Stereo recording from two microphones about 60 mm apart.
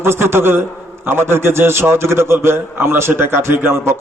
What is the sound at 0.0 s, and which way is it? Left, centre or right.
A man's voice, right.